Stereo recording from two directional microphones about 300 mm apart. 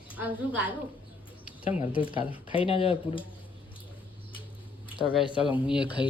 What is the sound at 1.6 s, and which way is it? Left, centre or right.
Speech, centre.